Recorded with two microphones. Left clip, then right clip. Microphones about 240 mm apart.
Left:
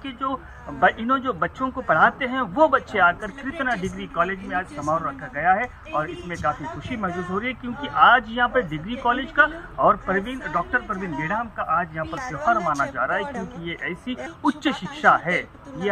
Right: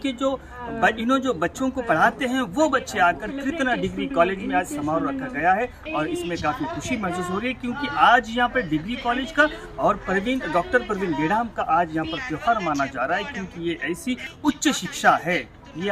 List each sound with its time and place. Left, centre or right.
0.0 s speech: right